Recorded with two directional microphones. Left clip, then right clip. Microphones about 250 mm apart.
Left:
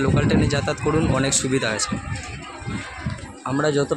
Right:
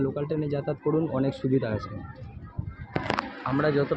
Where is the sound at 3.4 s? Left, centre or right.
Left.